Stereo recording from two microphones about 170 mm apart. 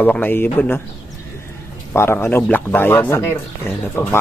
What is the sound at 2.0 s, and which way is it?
Speech, 15° left (ahead or behind).